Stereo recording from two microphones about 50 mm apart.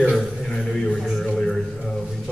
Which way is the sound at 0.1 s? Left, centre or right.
Centre.